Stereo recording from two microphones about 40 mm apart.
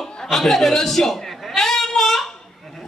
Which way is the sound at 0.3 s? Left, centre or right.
Centre.